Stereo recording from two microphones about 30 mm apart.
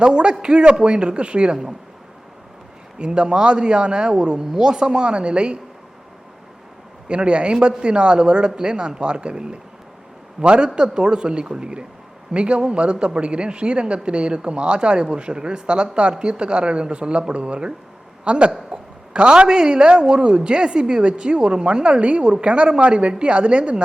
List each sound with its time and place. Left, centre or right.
0.0 s speech: right
3.0 s a man's voice: right
7.1 s a man's voice: right